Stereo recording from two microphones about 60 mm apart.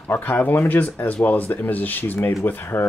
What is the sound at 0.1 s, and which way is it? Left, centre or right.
Speech, left.